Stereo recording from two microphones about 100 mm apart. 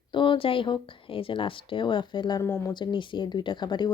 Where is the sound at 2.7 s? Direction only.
50° left (ahead or behind).